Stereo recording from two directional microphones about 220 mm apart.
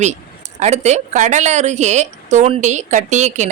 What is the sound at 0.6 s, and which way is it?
A woman's voice, 30° right (ahead or behind).